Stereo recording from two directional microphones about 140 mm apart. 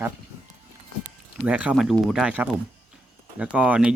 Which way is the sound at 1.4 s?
10° right (ahead or behind).